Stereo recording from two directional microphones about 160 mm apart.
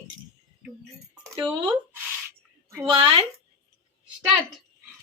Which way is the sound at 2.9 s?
35° right (ahead or behind).